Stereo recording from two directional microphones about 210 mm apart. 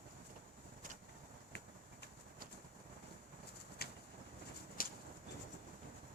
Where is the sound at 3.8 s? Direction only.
50° left (ahead or behind).